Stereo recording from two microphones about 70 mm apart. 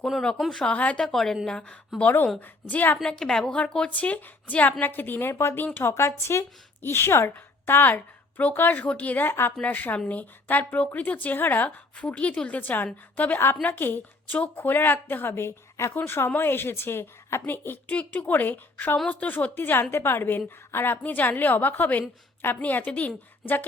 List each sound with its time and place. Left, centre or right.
0.0 s speech: centre
0.6 s a woman's voice: centre
1.0 s a woman's voice: centre
2.0 s a woman's voice: left
3.2 s speech: centre
3.8 s a woman's voice: left
5.3 s speech: left
5.5 s a woman's voice: left
5.9 s a woman's voice: left
11.9 s a woman's voice: centre; by 17.4 s left
17.8 s a woman's voice: left